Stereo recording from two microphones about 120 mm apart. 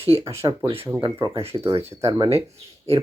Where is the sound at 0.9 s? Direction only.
20° right (ahead or behind).